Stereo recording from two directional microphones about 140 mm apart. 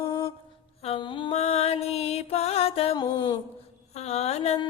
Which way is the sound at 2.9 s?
30° left (ahead or behind).